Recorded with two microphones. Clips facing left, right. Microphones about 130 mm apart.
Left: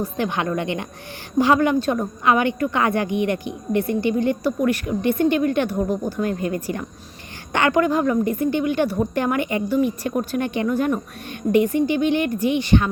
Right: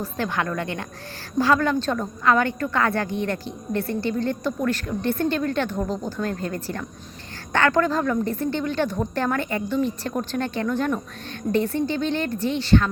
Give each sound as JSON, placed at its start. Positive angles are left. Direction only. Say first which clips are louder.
{"t": 0.0, "sound": "a woman's voice", "louder": "left 3 dB", "side_deg": 20}